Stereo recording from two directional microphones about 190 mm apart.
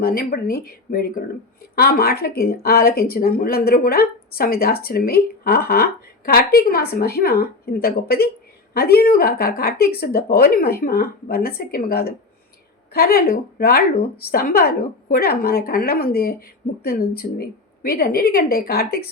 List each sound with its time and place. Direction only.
0.0 s speech: 50° left (ahead or behind)